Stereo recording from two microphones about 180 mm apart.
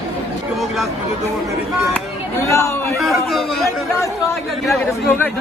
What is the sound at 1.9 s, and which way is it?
Speech, 15° left (ahead or behind).